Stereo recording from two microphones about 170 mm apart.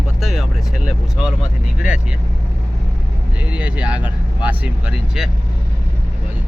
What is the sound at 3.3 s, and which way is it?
Speech, 10° right (ahead or behind).